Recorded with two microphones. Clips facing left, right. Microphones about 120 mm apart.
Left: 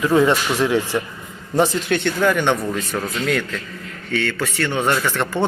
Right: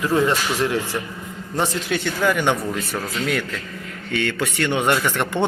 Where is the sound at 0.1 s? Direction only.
30° left (ahead or behind).